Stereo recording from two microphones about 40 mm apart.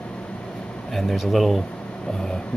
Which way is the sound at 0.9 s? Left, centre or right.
Centre.